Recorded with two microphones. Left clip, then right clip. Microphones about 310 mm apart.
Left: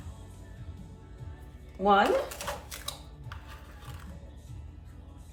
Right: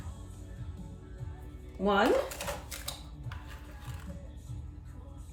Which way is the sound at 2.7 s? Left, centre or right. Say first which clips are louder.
Left 1 dB; centre.